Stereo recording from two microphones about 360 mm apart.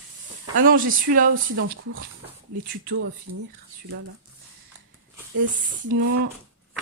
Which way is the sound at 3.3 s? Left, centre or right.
Right.